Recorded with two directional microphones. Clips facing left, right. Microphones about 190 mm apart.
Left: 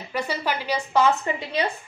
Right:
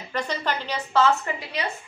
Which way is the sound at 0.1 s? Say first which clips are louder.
Left 1 dB; 10° left (ahead or behind).